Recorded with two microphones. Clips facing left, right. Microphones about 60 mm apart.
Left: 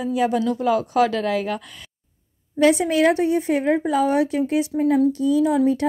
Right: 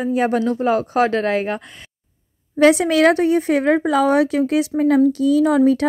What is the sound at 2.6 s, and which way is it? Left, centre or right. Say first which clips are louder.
A woman's voice: right 4 dB; right.